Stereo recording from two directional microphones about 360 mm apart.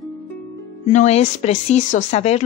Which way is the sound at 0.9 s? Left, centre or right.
Centre.